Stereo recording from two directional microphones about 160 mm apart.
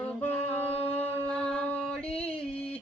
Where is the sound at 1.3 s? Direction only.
5° left (ahead or behind).